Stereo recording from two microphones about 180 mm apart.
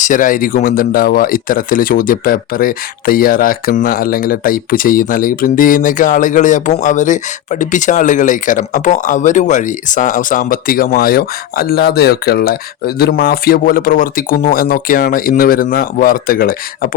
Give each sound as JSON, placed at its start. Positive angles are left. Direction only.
{"t": 0.0, "sound": "speech", "side_deg": 45}